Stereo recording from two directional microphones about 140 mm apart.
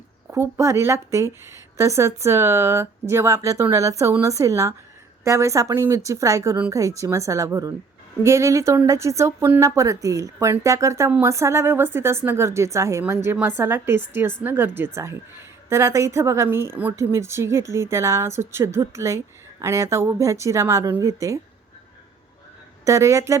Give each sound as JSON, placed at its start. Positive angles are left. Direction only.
{"t": 0.3, "sound": "a woman's voice", "side_deg": -20}
{"t": 22.8, "sound": "a woman's voice", "side_deg": -20}